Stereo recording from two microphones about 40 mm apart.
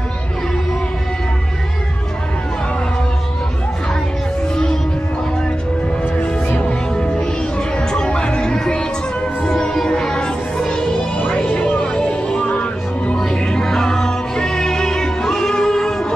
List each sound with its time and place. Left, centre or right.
6.7 s music: left
12.4 s music: left
13.3 s music: centre